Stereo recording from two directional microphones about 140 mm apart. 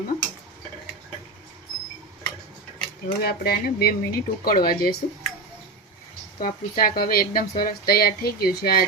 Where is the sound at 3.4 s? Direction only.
90° left.